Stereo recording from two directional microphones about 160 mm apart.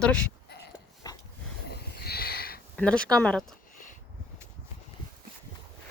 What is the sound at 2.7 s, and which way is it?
Speech, 5° left (ahead or behind).